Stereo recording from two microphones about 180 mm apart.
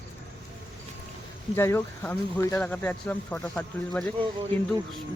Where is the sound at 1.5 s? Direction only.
15° left (ahead or behind).